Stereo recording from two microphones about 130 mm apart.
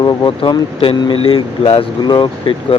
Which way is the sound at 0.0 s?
35° left (ahead or behind).